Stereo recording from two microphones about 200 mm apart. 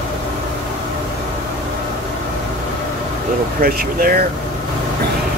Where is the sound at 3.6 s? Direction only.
45° right (ahead or behind).